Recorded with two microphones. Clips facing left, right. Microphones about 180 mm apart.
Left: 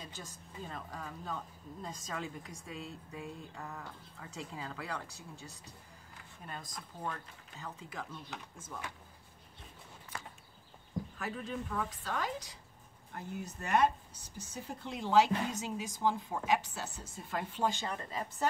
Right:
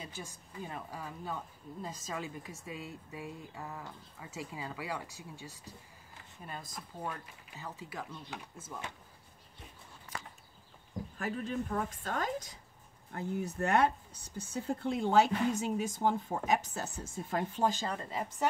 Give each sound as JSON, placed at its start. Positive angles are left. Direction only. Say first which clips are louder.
{"t": 0.0, "sound": "speech", "louder": "right 3 dB", "side_deg": -10}
{"t": 11.1, "sound": "speech", "louder": "right 6 dB", "side_deg": -45}
{"t": 13.1, "sound": "speech", "louder": "right 6 dB", "side_deg": -60}
{"t": 17.9, "sound": "a woman's voice", "louder": "right 2 dB", "side_deg": -20}